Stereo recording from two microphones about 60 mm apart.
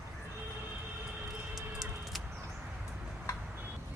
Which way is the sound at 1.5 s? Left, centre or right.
Centre.